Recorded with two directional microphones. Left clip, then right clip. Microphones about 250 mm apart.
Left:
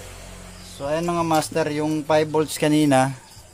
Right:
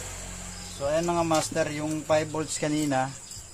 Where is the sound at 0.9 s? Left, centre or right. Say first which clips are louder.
Left 3 dB; left.